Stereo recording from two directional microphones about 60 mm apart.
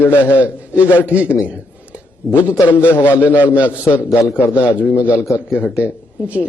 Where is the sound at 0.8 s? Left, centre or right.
Left.